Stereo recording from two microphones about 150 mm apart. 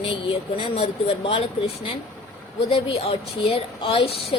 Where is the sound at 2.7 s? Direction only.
40° left (ahead or behind).